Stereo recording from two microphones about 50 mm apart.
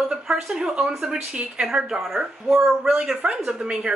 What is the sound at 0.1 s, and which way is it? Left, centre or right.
Speech, centre.